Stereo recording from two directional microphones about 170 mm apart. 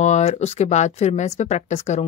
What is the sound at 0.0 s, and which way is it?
Speech, 40° left (ahead or behind).